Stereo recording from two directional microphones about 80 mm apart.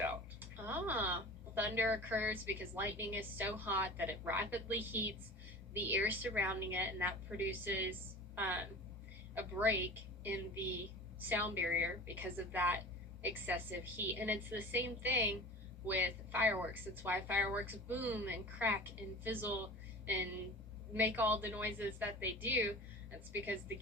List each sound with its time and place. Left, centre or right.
0.0 s a sound: right
1.5 s a woman's voice: right
20.9 s a woman's voice: right